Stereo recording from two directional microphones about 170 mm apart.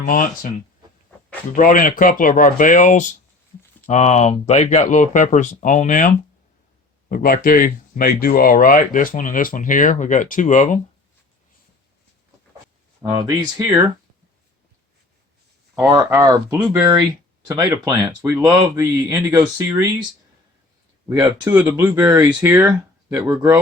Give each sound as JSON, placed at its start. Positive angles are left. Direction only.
{"t": 0.0, "sound": "speech", "side_deg": 55}
{"t": 1.5, "sound": "speech", "side_deg": 50}
{"t": 13.0, "sound": "speech", "side_deg": -20}
{"t": 15.8, "sound": "speech", "side_deg": -15}
{"t": 21.1, "sound": "speech", "side_deg": -15}